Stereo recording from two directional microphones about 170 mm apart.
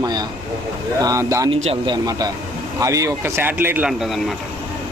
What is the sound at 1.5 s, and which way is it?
Speech, 35° right (ahead or behind).